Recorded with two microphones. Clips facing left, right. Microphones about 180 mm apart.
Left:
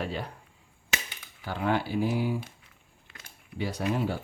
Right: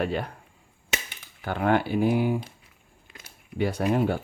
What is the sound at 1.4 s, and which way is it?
Speech, 55° right (ahead or behind).